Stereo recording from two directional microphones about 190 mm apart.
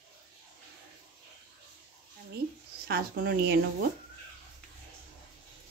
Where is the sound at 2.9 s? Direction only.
55° right (ahead or behind).